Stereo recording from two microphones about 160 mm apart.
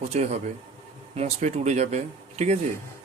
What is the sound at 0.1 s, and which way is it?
Speech, 40° right (ahead or behind).